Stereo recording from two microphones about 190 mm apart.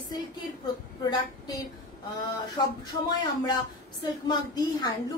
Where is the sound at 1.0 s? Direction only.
20° left (ahead or behind).